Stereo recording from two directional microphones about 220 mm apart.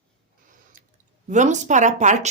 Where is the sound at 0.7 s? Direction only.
35° right (ahead or behind).